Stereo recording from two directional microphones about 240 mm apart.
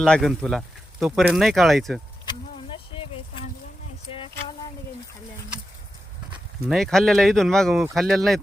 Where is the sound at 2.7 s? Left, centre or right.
Left.